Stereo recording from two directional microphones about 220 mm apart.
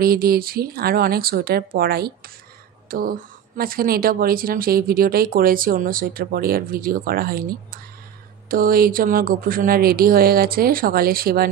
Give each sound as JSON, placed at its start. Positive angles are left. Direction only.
{"t": 0.0, "sound": "a woman's voice", "side_deg": -45}